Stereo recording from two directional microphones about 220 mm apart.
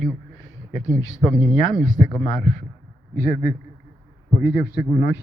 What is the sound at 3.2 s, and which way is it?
A man's voice, 40° left (ahead or behind).